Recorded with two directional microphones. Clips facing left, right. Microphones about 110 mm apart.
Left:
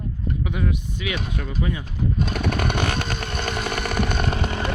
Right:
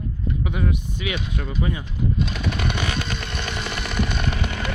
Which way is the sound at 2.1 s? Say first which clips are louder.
Left 2 dB; 50° left (ahead or behind).